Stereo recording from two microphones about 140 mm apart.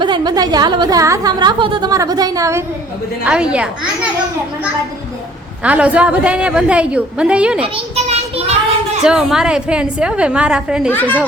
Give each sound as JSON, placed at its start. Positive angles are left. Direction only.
{"t": 0.0, "sound": "a woman's voice", "side_deg": -35}
{"t": 1.4, "sound": "a woman's voice", "side_deg": -35}
{"t": 3.2, "sound": "a woman's voice", "side_deg": -5}
{"t": 5.6, "sound": "a woman's voice", "side_deg": -10}
{"t": 7.6, "sound": "children playing", "side_deg": -50}
{"t": 9.0, "sound": "a woman's voice", "side_deg": -5}
{"t": 10.9, "sound": "speech", "side_deg": 15}